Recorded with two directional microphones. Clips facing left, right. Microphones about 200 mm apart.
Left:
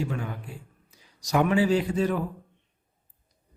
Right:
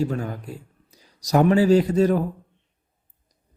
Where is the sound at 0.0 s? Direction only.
40° right (ahead or behind).